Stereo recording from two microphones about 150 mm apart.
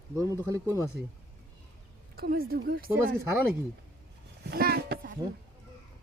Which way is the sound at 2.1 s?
85° right.